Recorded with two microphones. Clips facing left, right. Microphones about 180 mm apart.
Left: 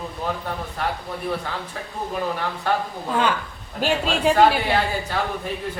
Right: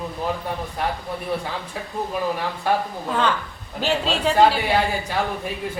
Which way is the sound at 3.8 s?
10° left (ahead or behind).